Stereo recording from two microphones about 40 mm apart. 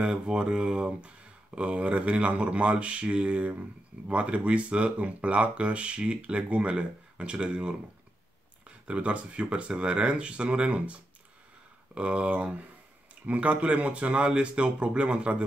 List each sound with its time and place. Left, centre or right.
0.0 s speech: right